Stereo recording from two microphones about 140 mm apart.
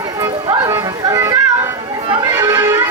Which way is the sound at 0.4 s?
20° right (ahead or behind).